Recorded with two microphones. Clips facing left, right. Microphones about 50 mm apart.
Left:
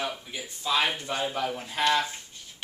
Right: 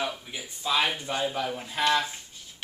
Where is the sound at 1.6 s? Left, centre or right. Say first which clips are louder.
Even; centre.